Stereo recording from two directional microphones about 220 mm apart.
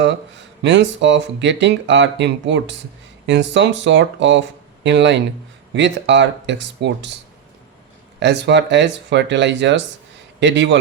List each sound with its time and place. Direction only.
0.6 s speech: 55° right (ahead or behind)
8.2 s speech: 50° right (ahead or behind)